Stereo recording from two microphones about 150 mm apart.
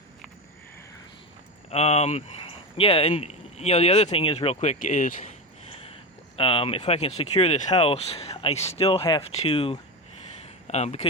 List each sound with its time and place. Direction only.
1.7 s speech: 45° left (ahead or behind)